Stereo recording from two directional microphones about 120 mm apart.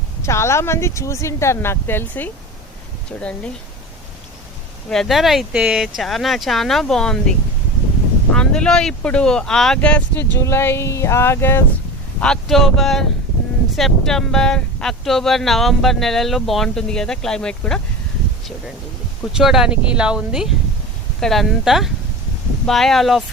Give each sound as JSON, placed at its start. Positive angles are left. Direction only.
{"t": 0.2, "sound": "speech", "side_deg": 25}
{"t": 4.9, "sound": "speech", "side_deg": 0}
{"t": 10.3, "sound": "speech", "side_deg": 25}
{"t": 12.2, "sound": "speech", "side_deg": 5}
{"t": 19.3, "sound": "speech", "side_deg": -5}